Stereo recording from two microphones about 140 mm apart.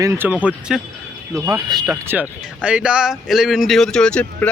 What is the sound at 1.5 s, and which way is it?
Speech, 20° right (ahead or behind).